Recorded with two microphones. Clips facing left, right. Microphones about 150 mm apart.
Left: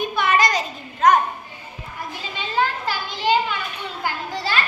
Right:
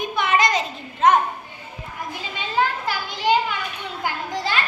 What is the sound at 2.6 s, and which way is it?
Children playing, 10° right (ahead or behind).